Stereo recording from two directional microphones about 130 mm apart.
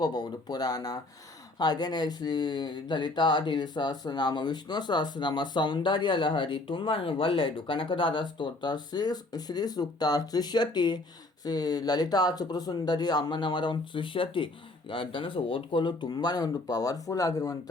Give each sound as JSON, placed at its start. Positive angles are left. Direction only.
{"t": 0.0, "sound": "speech", "side_deg": 35}